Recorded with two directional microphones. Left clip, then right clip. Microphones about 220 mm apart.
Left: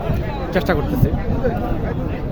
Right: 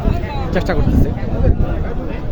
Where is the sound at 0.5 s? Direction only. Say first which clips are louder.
Left 1 dB; 10° left (ahead or behind).